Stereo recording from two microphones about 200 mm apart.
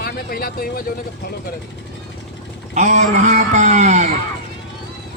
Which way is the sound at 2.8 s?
35° right (ahead or behind).